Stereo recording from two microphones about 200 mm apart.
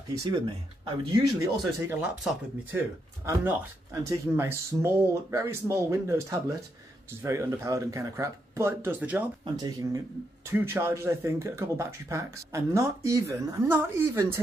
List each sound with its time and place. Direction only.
0.8 s speech: 25° right (ahead or behind)
1.8 s speech: 10° right (ahead or behind)
9.4 s speech: 20° right (ahead or behind)